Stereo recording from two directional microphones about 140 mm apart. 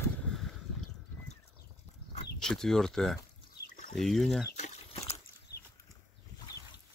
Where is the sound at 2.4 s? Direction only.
5° left (ahead or behind).